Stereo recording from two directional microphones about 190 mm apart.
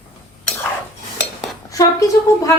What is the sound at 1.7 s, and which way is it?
Speech, 15° left (ahead or behind).